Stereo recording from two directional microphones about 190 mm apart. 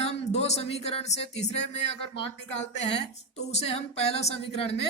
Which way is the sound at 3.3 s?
35° left (ahead or behind).